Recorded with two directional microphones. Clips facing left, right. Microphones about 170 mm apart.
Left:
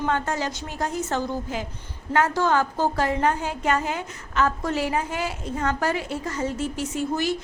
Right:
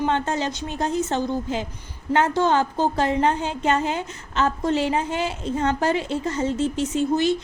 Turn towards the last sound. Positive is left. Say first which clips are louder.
# right 5 dB
turn(degrees=-20)  # may be behind; listen again after turning